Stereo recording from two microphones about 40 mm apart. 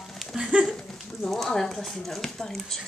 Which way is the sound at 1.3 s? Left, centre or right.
Centre.